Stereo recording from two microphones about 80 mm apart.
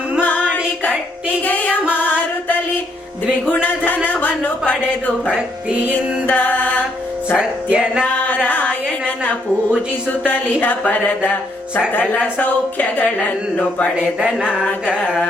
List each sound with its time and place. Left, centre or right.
0.2 s music: left
1.5 s music: left
3.5 s music: left
5.2 s speech: centre
6.2 s music: left
7.3 s speech: centre
8.0 s music: left
8.4 s a sound: centre
10.2 s speech: left
12.4 s speech: left
14.0 s speech: centre